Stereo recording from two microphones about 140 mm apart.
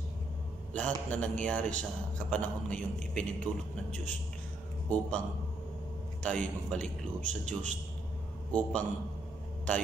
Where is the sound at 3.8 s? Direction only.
55° right (ahead or behind).